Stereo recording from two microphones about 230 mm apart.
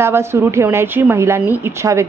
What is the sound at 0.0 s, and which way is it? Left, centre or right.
A woman's voice, centre.